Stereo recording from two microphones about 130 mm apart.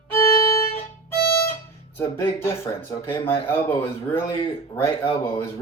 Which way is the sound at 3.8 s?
40° left (ahead or behind).